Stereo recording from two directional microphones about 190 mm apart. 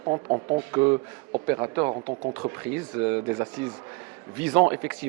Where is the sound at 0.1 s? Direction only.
30° right (ahead or behind).